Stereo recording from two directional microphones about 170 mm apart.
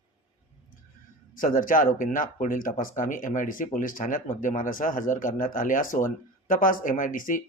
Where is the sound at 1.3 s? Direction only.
50° left (ahead or behind).